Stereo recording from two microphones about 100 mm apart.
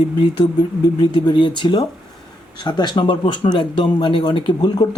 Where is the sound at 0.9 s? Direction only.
50° left (ahead or behind).